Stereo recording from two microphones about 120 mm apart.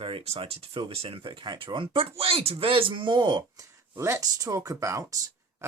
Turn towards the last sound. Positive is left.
turn(degrees=-25)  # may be behind; listen again after turning